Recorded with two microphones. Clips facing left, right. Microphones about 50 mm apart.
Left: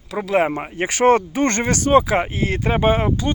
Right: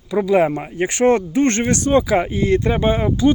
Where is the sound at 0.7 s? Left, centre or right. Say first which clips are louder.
Left 4 dB; left.